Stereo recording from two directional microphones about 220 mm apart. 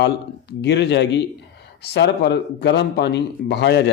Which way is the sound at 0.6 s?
50° left (ahead or behind).